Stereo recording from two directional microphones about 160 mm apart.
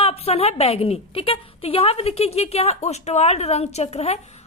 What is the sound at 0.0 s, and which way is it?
A woman's voice, 40° left (ahead or behind).